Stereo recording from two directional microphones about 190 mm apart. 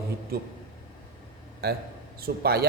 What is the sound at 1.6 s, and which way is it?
Speech, 55° right (ahead or behind).